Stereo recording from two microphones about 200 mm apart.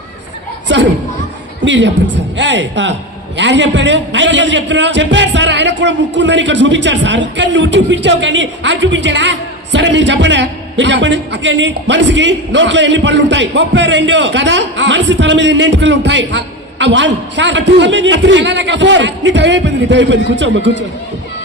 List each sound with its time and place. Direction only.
0.7 s a woman's voice: 65° right (ahead or behind)